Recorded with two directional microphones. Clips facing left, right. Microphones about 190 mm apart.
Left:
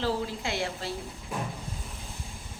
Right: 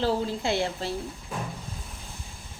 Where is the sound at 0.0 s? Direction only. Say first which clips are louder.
Right 4 dB; 30° right (ahead or behind).